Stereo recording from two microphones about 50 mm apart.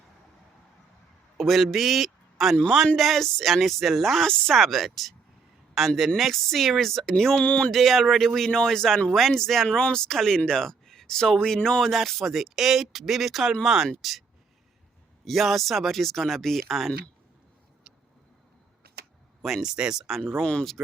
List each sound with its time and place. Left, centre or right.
1.4 s a man's voice: centre
7.3 s speech: left
7.7 s speech: centre
19.4 s speech: centre
20.4 s speech: centre